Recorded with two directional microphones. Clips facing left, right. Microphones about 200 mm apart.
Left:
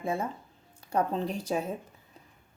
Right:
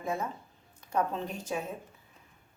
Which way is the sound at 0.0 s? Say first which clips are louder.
Left 2 dB; 30° left (ahead or behind).